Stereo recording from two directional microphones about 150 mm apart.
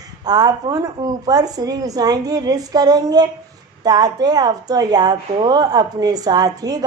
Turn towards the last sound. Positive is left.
turn(degrees=-25)  # may be behind; listen again after turning